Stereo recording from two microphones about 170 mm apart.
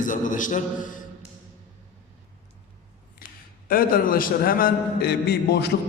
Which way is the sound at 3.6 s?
55° left (ahead or behind).